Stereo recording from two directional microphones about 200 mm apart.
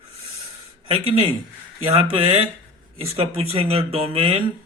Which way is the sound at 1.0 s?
30° right (ahead or behind).